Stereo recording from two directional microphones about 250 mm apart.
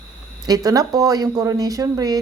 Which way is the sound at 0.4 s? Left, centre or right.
Centre.